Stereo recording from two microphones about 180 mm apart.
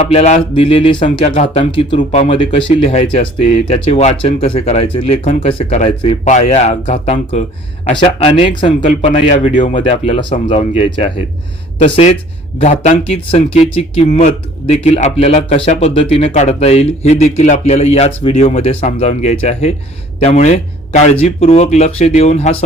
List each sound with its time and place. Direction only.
0.1 s speech: 35° left (ahead or behind)
5.5 s speech: 30° left (ahead or behind)